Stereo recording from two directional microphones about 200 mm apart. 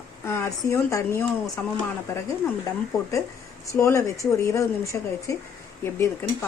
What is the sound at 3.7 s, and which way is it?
Speech, 15° left (ahead or behind).